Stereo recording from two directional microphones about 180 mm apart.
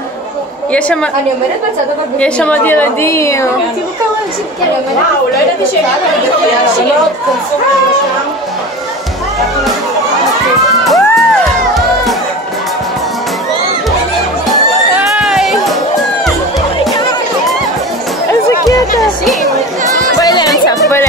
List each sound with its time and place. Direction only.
2.1 s a woman's voice: 5° left (ahead or behind)
10.8 s music: centre (ahead or behind)
15.0 s music: 5° right (ahead or behind)
20.2 s music: 20° left (ahead or behind)